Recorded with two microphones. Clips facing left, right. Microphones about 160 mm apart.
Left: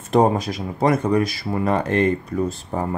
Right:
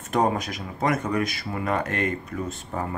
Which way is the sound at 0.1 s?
30° left (ahead or behind).